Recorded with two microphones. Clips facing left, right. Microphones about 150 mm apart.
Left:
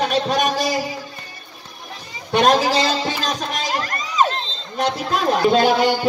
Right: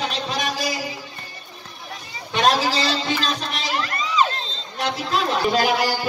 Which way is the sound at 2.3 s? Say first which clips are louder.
Left 4 dB; 45° left (ahead or behind).